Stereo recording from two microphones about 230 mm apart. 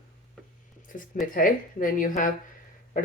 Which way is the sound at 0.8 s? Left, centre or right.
Left.